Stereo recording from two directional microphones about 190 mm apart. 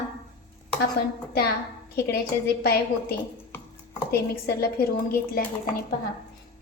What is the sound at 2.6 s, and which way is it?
Speech, 55° left (ahead or behind).